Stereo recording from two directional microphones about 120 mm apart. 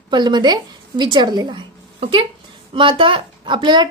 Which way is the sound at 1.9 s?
45° right (ahead or behind).